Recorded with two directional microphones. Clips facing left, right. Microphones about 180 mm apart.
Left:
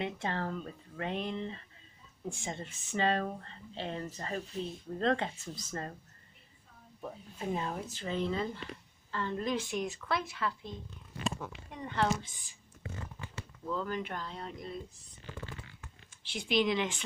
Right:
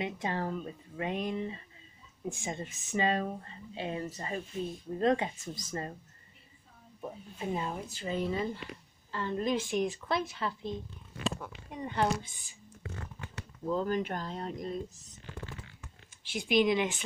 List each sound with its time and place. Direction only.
0.0 s speech: 15° right (ahead or behind)
7.0 s speech: 10° right (ahead or behind); by 10.7 s 25° right (ahead or behind)
11.7 s speech: 15° right (ahead or behind)
13.7 s speech: 40° right (ahead or behind)
16.3 s speech: 15° right (ahead or behind)